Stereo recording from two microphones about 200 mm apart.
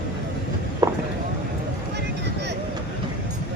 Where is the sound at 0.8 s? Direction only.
20° right (ahead or behind).